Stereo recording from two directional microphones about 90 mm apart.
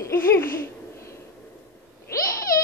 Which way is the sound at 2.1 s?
40° left (ahead or behind).